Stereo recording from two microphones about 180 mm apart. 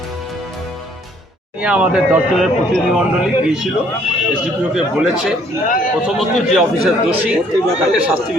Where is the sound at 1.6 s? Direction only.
5° right (ahead or behind).